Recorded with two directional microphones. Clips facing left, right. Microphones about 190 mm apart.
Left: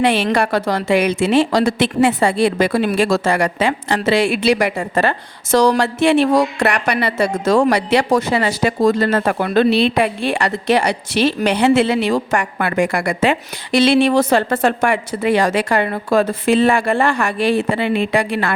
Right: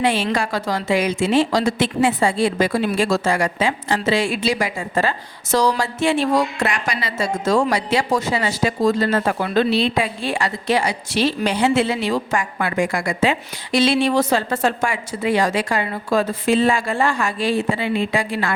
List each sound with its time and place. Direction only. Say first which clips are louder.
0.0 s a woman's voice: left 4 dB; 70° left (ahead or behind)